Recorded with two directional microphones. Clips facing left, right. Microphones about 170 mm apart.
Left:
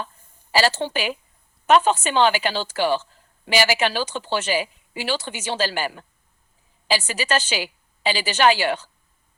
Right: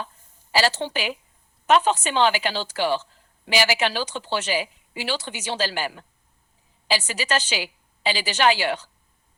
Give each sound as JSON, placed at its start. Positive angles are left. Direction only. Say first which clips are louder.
{"t": 0.5, "sound": "speech", "louder": "left 2 dB", "side_deg": 50}